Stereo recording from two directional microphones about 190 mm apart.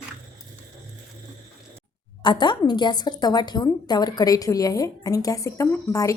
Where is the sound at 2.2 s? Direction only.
25° left (ahead or behind).